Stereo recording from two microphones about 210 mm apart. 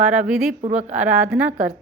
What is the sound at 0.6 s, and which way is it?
Speech, 30° right (ahead or behind).